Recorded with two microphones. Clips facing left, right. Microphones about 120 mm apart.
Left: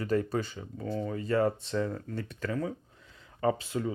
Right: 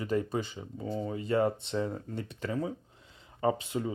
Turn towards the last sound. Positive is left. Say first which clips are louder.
# left 1 dB
turn(degrees=-25)  # may be behind; listen again after turning